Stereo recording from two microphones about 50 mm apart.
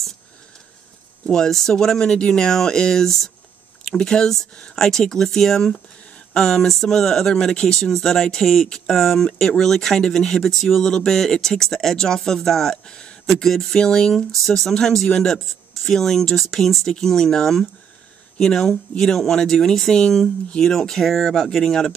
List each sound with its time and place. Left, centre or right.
1.2 s speech: centre
12.8 s speech: centre
13.3 s speech: centre